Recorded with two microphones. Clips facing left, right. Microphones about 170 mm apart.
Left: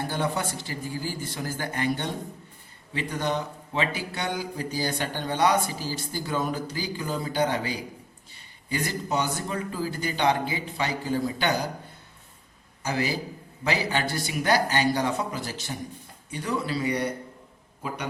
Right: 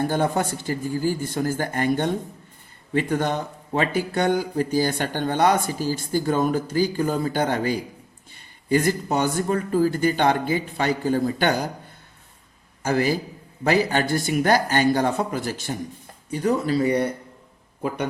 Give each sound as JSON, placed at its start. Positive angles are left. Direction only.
{"t": 0.0, "sound": "a man's voice", "side_deg": -50}
{"t": 12.8, "sound": "a man's voice", "side_deg": -50}